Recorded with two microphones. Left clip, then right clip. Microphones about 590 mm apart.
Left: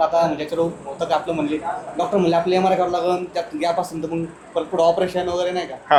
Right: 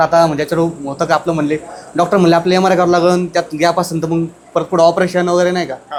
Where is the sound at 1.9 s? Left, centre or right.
Right.